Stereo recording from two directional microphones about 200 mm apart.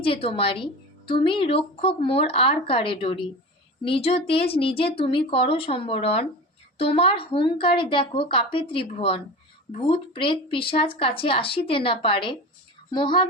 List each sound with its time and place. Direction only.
0.0 s a woman's voice: 30° left (ahead or behind)